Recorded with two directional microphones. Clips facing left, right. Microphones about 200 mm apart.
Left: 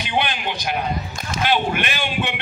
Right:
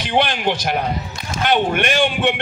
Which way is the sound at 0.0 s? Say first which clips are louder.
Right 5 dB; 75° right (ahead or behind).